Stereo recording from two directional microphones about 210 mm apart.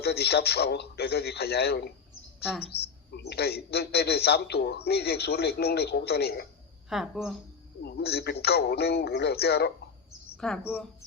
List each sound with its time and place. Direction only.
0.0 s a man's voice: 50° left (ahead or behind)
3.1 s a man's voice: 50° left (ahead or behind)
6.9 s speech: centre (ahead or behind)
7.8 s a man's voice: 50° left (ahead or behind)
10.3 s speech: centre (ahead or behind)